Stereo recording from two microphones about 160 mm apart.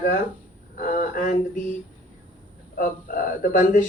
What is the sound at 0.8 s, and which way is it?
Speech, 60° left (ahead or behind).